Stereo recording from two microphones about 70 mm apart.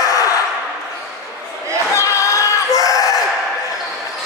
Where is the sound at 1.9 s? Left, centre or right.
Left.